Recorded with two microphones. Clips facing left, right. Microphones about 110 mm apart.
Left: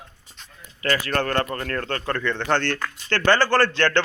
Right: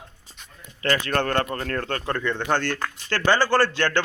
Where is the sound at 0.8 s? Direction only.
30° right (ahead or behind).